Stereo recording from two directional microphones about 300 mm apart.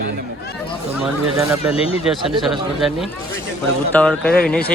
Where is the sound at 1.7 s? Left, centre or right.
Centre.